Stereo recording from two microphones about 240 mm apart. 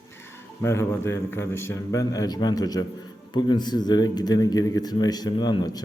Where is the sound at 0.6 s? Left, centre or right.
Centre.